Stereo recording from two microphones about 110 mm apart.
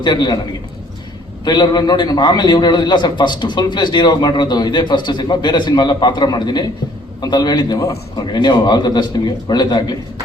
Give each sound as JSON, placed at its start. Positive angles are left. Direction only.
{"t": 0.0, "sound": "a man's voice", "side_deg": 40}
{"t": 1.5, "sound": "a man's voice", "side_deg": 40}